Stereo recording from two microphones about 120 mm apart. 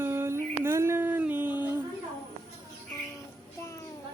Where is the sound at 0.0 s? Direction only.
20° right (ahead or behind).